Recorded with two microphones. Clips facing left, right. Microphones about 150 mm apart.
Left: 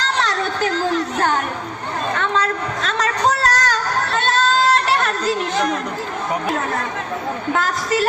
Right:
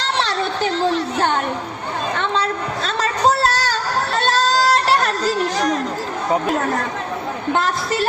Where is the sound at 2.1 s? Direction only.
30° right (ahead or behind).